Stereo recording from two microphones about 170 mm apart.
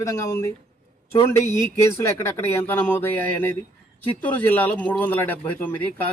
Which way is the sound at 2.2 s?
15° left (ahead or behind).